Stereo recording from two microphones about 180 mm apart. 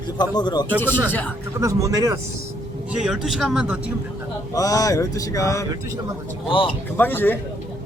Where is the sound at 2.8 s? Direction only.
5° right (ahead or behind).